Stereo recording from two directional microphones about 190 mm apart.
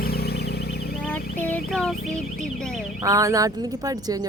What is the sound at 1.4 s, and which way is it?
Speech, 10° left (ahead or behind).